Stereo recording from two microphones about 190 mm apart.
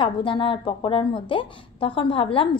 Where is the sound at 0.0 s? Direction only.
25° left (ahead or behind).